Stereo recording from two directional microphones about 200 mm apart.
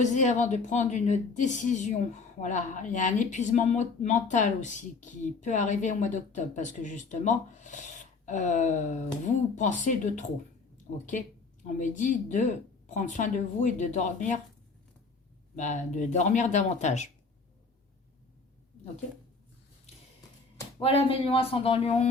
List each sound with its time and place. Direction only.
0.0 s a woman's voice: 35° left (ahead or behind)
15.5 s a woman's voice: 40° left (ahead or behind)
20.7 s speech: 30° left (ahead or behind)